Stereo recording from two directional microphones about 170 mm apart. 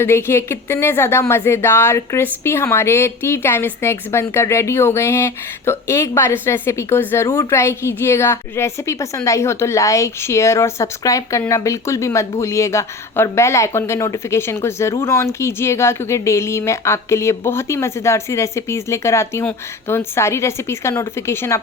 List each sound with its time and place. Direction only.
0.0 s speech: 15° left (ahead or behind)